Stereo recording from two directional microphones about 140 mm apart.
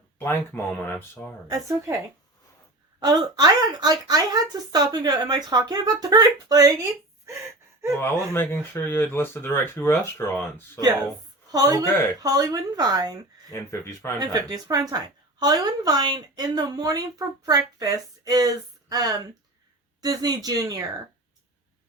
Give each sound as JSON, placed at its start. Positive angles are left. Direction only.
{"t": 0.2, "sound": "speech", "side_deg": 15}
{"t": 1.5, "sound": "speech", "side_deg": -25}
{"t": 3.0, "sound": "speech", "side_deg": -30}
{"t": 7.3, "sound": "gasp", "side_deg": -20}
{"t": 7.9, "sound": "speech", "side_deg": 15}
{"t": 10.8, "sound": "speech", "side_deg": -30}
{"t": 13.5, "sound": "speech", "side_deg": 20}
{"t": 14.2, "sound": "speech", "side_deg": -25}